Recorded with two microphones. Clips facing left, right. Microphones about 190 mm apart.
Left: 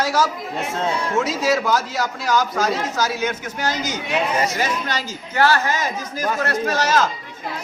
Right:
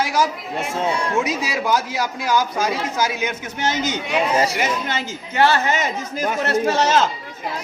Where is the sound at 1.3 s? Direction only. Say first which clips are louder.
Left 2 dB; 15° right (ahead or behind); by 4.6 s 30° right (ahead or behind).